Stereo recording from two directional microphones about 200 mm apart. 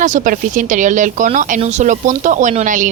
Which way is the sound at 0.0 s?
40° right (ahead or behind).